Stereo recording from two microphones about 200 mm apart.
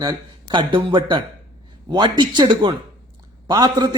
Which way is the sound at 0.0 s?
20° right (ahead or behind).